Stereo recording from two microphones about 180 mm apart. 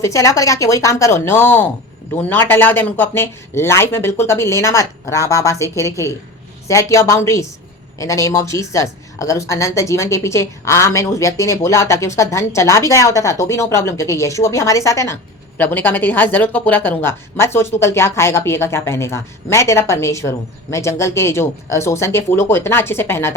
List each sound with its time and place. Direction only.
0.0 s a woman's voice: 15° left (ahead or behind)